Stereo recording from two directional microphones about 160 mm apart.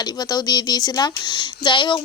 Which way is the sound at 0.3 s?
25° left (ahead or behind).